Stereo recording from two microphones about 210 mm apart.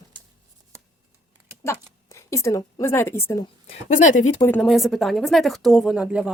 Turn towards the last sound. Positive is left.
turn(degrees=-5)  # may be behind; listen again after turning